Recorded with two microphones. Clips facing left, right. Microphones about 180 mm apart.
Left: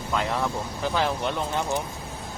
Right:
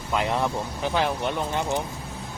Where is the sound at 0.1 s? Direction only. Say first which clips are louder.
Right 2 dB; 15° right (ahead or behind).